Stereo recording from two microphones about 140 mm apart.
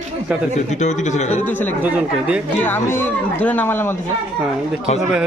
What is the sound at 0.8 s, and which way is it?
Speech, 55° left (ahead or behind).